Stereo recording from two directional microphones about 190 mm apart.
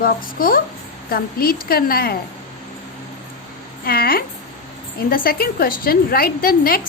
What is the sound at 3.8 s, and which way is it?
A woman's voice, 50° left (ahead or behind).